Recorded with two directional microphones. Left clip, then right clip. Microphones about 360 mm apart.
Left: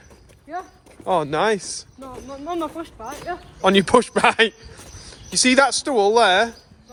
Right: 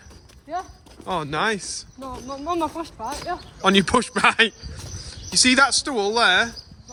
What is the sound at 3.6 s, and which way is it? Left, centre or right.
A man's voice, centre.